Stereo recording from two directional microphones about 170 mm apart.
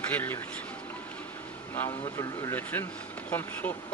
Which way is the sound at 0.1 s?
10° left (ahead or behind).